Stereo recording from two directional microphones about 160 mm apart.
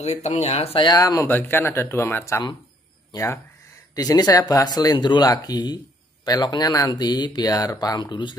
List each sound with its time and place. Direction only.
0.0 s speech: 45° left (ahead or behind)
0.8 s speech: 20° left (ahead or behind)